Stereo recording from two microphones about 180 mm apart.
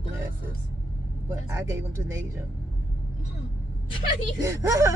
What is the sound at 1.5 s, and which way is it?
Speech, 15° right (ahead or behind).